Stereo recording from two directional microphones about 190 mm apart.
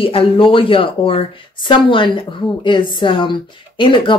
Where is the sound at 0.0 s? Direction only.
30° left (ahead or behind).